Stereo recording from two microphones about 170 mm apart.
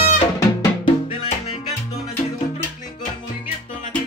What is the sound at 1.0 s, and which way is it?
Music, 35° left (ahead or behind).